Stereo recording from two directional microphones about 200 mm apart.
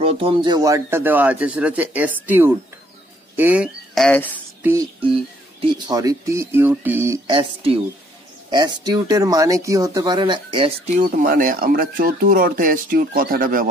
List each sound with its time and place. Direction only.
0.0 s speech: 30° right (ahead or behind); by 4.3 s 5° left (ahead or behind)
5.6 s speech: 20° right (ahead or behind)
7.2 s speech: 25° right (ahead or behind)
11.2 s speech: 45° right (ahead or behind)